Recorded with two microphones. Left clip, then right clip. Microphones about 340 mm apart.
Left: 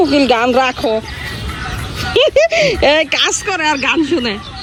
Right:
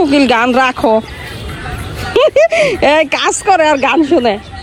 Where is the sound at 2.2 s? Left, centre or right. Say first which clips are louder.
Right 2 dB; right.